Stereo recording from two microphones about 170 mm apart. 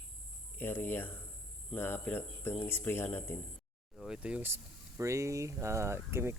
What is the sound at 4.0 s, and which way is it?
Speech, 5° right (ahead or behind).